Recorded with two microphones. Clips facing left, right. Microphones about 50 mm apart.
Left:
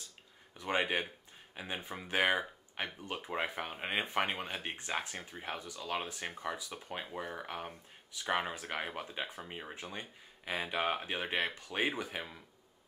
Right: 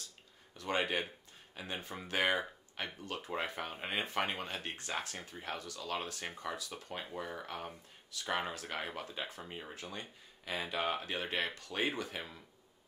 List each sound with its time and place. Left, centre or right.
0.6 s speech: centre